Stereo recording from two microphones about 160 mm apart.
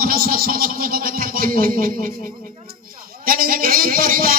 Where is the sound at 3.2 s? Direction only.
65° right (ahead or behind).